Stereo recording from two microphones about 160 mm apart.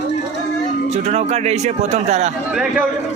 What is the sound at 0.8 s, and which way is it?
Speech, 45° right (ahead or behind).